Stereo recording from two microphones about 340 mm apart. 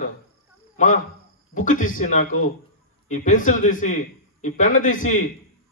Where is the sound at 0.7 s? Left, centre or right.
Left.